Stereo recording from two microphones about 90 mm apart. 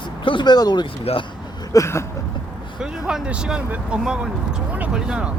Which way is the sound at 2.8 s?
10° right (ahead or behind).